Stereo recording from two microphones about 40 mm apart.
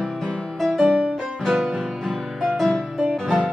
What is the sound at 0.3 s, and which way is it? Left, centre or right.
Music, centre.